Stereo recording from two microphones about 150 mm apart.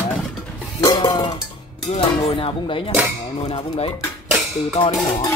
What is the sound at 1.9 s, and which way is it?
Speech, 35° left (ahead or behind).